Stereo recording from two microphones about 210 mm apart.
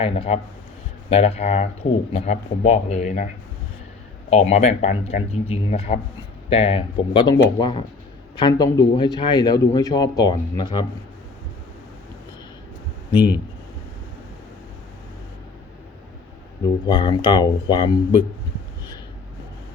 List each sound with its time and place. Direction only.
0.0 s speech: 25° left (ahead or behind)
4.3 s speech: 30° left (ahead or behind)
13.1 s speech: 20° left (ahead or behind)
16.9 s speech: 20° left (ahead or behind)